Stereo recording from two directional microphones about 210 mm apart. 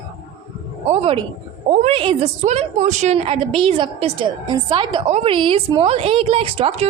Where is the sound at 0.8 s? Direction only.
30° right (ahead or behind).